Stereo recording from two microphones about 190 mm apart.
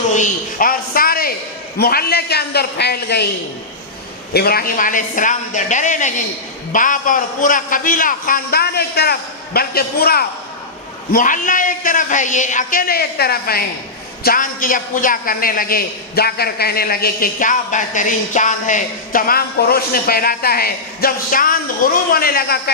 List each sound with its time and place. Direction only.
0.1 s a man's voice: 45° left (ahead or behind); by 3.2 s 60° left (ahead or behind)
4.4 s a man's voice: 55° left (ahead or behind)